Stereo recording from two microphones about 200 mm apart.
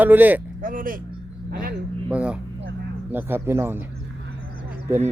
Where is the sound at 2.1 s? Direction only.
5° right (ahead or behind).